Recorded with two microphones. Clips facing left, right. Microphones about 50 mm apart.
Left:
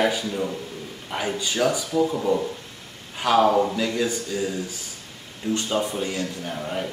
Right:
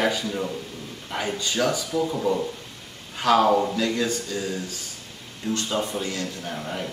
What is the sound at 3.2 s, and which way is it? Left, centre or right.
Speech, centre.